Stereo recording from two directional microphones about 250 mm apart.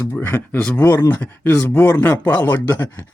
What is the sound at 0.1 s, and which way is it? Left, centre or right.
Speech, centre.